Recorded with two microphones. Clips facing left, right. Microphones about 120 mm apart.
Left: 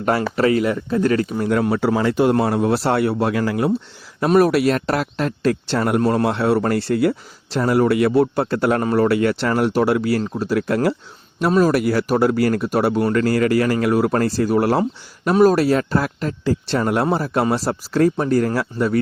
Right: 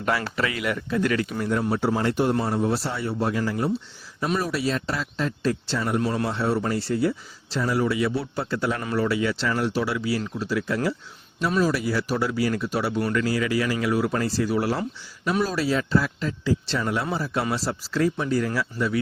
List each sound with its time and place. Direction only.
0.0 s speech: 40° left (ahead or behind)
1.5 s speech: 90° left; by 8.8 s 55° left (ahead or behind)
8.8 s speech: 40° left (ahead or behind)
9.0 s speech: 55° left (ahead or behind)